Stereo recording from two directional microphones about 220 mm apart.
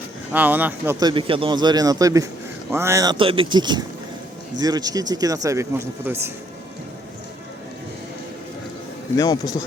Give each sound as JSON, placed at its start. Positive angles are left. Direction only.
{"t": 0.3, "sound": "speech", "side_deg": -10}
{"t": 9.1, "sound": "speech", "side_deg": 15}